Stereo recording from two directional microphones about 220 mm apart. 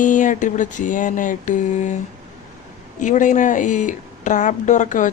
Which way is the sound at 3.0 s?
35° left (ahead or behind).